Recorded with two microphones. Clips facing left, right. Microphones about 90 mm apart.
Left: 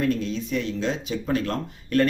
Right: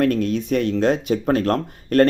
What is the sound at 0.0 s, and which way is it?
Speech, 55° right (ahead or behind).